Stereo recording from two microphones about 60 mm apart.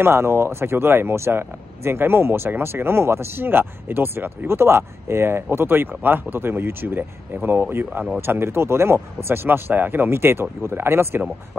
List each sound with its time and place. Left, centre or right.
0.0 s speech: right